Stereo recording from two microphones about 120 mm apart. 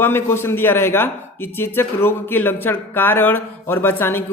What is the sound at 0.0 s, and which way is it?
Speech, 20° left (ahead or behind).